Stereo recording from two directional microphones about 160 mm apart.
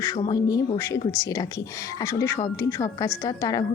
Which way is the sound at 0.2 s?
25° left (ahead or behind).